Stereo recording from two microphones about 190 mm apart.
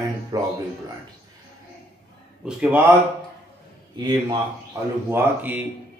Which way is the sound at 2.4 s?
5° right (ahead or behind).